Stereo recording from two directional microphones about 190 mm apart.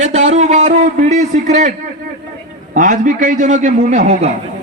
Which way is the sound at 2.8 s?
40° right (ahead or behind).